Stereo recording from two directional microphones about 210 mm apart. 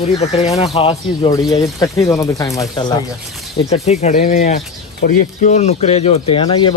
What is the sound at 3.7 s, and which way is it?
Speech, 30° left (ahead or behind).